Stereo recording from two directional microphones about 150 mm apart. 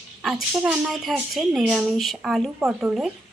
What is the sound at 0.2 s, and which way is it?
A woman's voice, 5° right (ahead or behind).